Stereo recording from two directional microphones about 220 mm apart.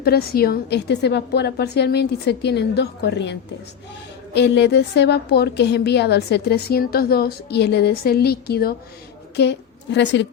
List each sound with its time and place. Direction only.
0.0 s a woman's voice: 45° left (ahead or behind)
4.4 s a woman's voice: 50° left (ahead or behind)